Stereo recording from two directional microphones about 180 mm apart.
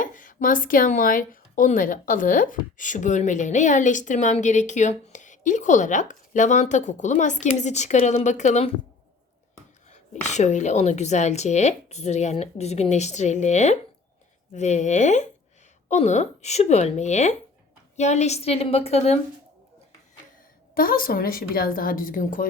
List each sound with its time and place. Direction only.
0.0 s speech: 45° left (ahead or behind)
9.9 s a woman's voice: 40° left (ahead or behind)
20.7 s speech: 50° left (ahead or behind)